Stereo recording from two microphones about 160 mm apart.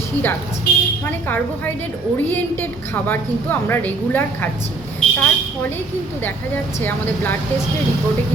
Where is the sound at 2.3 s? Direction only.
10° left (ahead or behind).